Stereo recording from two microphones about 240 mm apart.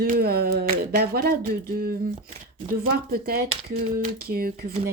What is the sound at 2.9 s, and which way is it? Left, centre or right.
Speech, right.